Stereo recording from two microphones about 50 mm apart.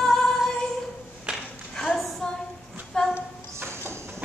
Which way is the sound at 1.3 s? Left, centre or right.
Centre.